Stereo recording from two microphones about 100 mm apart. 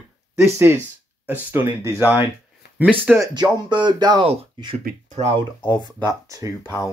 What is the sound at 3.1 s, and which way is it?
Speech, 5° right (ahead or behind).